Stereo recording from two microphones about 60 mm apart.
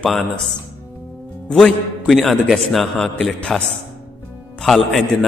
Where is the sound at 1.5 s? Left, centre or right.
Centre.